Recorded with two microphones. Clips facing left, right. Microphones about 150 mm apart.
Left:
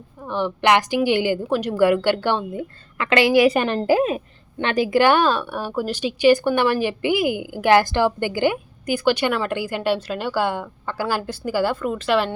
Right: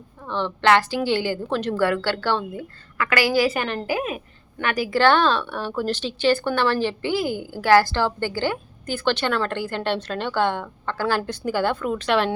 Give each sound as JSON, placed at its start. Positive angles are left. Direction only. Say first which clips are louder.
{"t": 0.2, "sound": "a woman's voice", "louder": "left 2 dB", "side_deg": 10}